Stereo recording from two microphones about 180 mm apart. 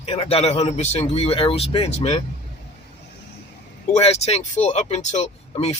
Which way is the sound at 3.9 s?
35° left (ahead or behind).